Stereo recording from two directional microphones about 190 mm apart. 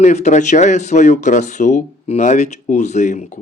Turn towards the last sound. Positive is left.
turn(degrees=40)  # may be behind; listen again after turning